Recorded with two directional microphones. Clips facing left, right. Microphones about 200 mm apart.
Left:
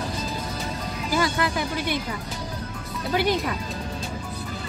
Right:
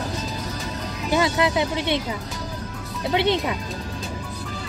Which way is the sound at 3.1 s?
25° right (ahead or behind).